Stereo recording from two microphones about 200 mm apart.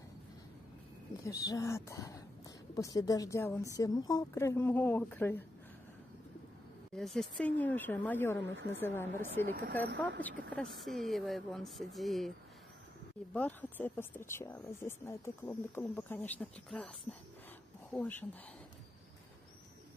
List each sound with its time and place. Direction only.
1.2 s a woman's voice: 20° left (ahead or behind)
7.0 s speech: centre (ahead or behind)
13.3 s speech: 5° left (ahead or behind)
17.9 s speech: 10° left (ahead or behind)